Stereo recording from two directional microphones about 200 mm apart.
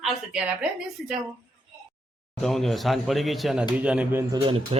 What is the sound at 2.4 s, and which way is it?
A woman's voice, centre (ahead or behind).